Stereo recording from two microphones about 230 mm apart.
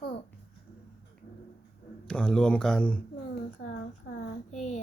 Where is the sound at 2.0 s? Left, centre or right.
Centre.